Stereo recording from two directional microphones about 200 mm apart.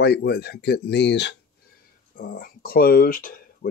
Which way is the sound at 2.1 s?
45° left (ahead or behind).